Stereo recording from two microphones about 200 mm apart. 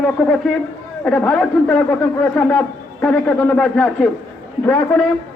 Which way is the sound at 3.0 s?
5° left (ahead or behind).